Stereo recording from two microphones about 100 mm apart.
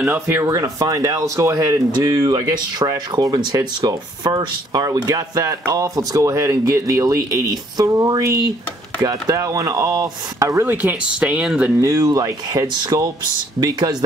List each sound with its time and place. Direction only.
0.0 s speech: 25° right (ahead or behind)
10.7 s speech: 20° right (ahead or behind)
11.8 s speech: 30° right (ahead or behind)